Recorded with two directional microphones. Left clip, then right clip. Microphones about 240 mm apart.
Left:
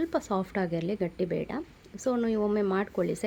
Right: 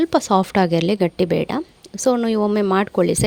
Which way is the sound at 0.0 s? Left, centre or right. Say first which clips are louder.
Right 13 dB; right.